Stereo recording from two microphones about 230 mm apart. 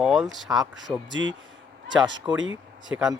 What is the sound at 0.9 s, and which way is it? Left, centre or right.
Speech, centre.